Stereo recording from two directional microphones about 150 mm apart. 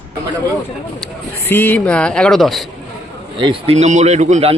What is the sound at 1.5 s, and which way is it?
Speech, 15° left (ahead or behind).